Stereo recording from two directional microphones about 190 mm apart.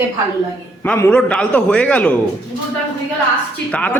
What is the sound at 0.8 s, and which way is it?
A man's voice, 10° left (ahead or behind).